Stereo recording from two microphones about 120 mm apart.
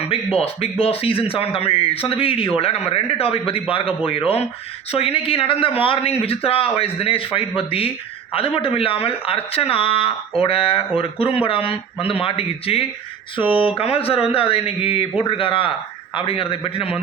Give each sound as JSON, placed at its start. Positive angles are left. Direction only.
{"t": 0.1, "sound": "speech", "side_deg": 55}